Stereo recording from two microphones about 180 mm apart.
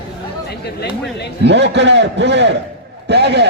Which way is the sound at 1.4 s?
75° right (ahead or behind).